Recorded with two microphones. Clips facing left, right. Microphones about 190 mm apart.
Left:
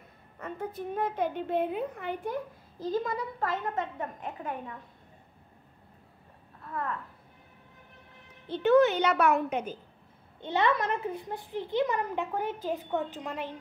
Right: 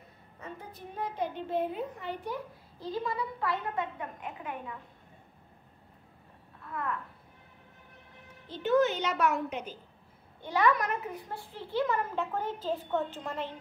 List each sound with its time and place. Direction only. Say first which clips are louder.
0.4 s a woman's voice: left 8 dB; 55° left (ahead or behind)
2.8 s a woman's voice: left 3 dB; 45° left (ahead or behind)
8.5 s a woman's voice: left 4 dB; 60° left (ahead or behind)
10.4 s a child's voice: even; 25° left (ahead or behind)